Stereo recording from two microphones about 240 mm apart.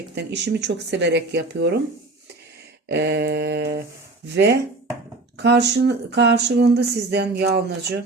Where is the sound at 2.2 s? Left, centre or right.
Right.